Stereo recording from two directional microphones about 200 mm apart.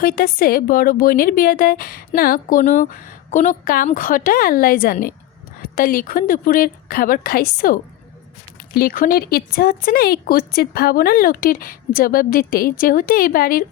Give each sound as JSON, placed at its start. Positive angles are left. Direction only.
{"t": 0.0, "sound": "speech", "side_deg": 45}